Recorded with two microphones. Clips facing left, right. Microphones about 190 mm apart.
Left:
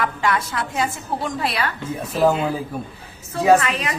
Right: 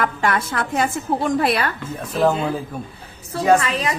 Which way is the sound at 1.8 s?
5° left (ahead or behind).